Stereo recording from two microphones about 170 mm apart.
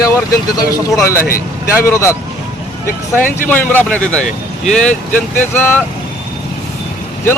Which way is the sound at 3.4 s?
10° left (ahead or behind).